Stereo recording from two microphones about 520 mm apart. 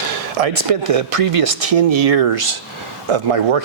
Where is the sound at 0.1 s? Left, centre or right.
Right.